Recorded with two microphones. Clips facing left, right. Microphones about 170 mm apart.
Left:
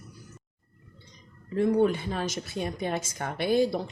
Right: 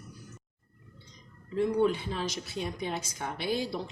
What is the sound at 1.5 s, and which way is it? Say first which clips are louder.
A woman's voice: left 3 dB; 50° left (ahead or behind).